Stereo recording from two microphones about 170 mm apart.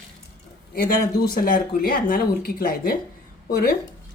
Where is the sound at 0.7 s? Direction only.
60° left (ahead or behind).